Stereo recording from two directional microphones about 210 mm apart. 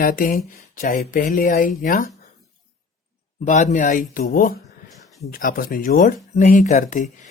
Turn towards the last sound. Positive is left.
turn(degrees=35)  # may be behind; listen again after turning